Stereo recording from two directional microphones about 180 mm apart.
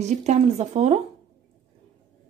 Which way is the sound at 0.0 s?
40° right (ahead or behind).